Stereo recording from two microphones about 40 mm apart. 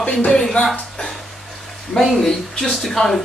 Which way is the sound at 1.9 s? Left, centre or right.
Centre.